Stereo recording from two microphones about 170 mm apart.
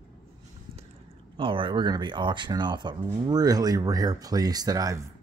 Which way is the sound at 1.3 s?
30° right (ahead or behind).